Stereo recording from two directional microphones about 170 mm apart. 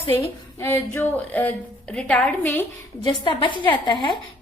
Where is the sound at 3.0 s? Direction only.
25° left (ahead or behind).